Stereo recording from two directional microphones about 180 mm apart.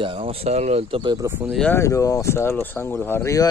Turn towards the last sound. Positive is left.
turn(degrees=15)  # may be behind; listen again after turning